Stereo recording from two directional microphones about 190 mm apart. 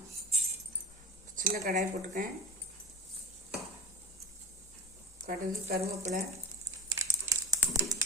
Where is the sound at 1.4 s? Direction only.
50° right (ahead or behind).